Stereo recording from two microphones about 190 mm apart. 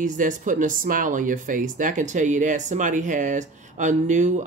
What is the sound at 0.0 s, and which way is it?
Speech, 45° right (ahead or behind).